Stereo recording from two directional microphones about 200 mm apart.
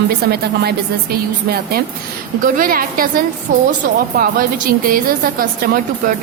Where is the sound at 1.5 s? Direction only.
50° right (ahead or behind).